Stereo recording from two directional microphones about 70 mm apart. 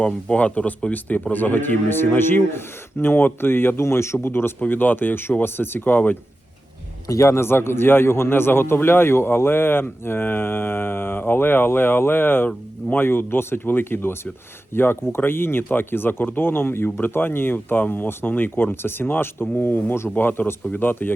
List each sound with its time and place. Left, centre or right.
0.0 s speech: centre
7.1 s speech: left